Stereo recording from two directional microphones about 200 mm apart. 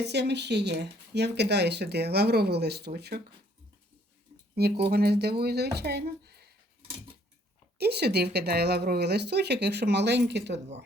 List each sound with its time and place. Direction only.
0.0 s speech: 55° right (ahead or behind)
4.5 s speech: 55° right (ahead or behind)
7.8 s speech: 55° right (ahead or behind)